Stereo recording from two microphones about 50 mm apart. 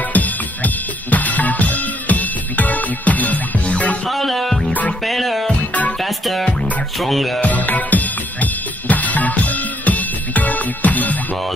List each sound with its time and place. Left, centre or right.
0.1 s music: left
4.1 s music: centre
7.4 s music: left